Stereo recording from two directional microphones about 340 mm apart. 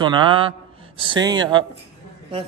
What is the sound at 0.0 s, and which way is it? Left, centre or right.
A man's voice, centre.